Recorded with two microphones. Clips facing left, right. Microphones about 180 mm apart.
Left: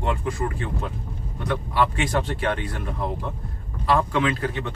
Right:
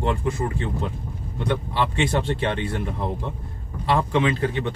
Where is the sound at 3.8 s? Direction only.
25° right (ahead or behind).